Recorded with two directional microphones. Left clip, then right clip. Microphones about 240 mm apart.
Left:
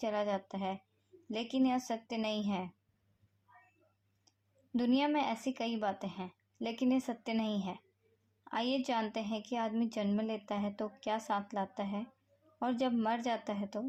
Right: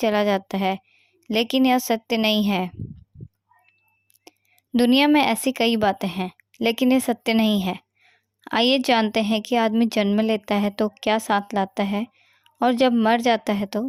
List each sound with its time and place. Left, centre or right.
0.0 s a woman's voice: right
4.3 s a woman's voice: right